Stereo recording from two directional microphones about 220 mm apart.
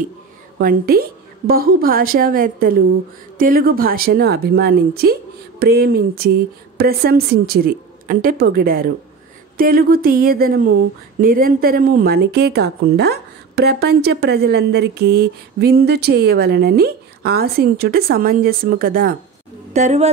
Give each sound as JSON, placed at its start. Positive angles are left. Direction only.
{"t": 0.6, "sound": "a woman's voice", "side_deg": -40}
{"t": 19.7, "sound": "a woman's voice", "side_deg": -30}